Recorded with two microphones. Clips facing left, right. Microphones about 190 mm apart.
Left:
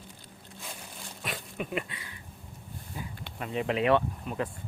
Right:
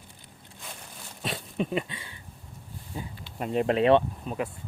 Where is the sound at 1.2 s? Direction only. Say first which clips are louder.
Right 6 dB; 30° right (ahead or behind).